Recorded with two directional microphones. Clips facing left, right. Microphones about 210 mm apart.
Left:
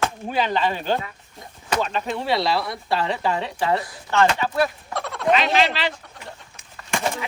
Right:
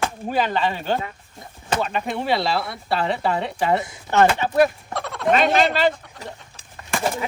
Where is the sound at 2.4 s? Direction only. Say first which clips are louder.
Left 1 dB; centre (ahead or behind).